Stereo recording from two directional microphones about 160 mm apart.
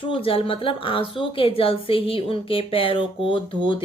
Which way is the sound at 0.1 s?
35° left (ahead or behind).